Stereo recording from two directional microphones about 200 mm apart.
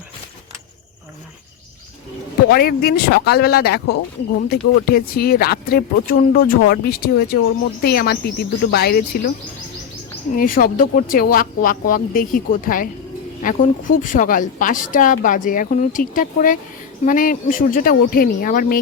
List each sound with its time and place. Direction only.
2.5 s speech: 50° left (ahead or behind)
10.3 s a woman's voice: 45° left (ahead or behind)